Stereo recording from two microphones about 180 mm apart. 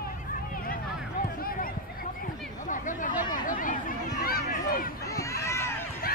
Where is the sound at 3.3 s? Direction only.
45° left (ahead or behind).